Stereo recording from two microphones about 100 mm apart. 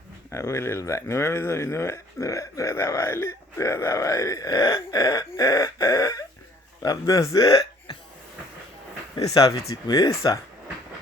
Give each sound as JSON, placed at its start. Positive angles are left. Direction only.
{"t": 0.3, "sound": "speech", "side_deg": 30}
{"t": 7.4, "sound": "hiccup", "side_deg": 60}
{"t": 9.5, "sound": "speech", "side_deg": 35}